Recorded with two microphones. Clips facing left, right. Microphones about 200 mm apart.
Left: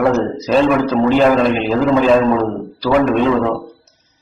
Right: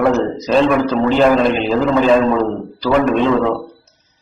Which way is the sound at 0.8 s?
10° right (ahead or behind).